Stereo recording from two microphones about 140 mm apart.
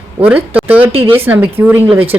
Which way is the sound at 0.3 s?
10° right (ahead or behind).